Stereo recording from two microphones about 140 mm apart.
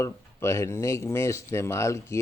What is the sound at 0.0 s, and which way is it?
Speech, 20° left (ahead or behind).